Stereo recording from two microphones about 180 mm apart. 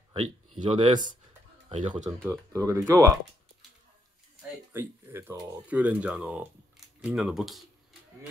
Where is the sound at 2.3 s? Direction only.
15° right (ahead or behind).